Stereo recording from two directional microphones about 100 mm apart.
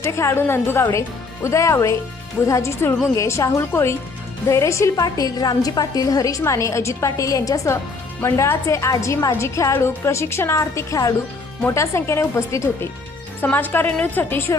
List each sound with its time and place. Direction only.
0.0 s a woman's voice: 25° left (ahead or behind)
13.4 s a woman's voice: 20° left (ahead or behind)